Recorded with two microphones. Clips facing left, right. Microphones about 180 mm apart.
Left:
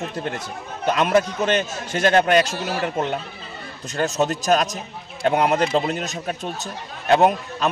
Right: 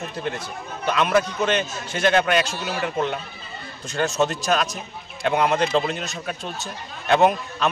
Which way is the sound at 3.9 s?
40° left (ahead or behind).